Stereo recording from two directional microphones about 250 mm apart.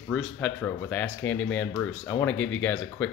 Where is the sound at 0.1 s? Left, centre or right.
Centre.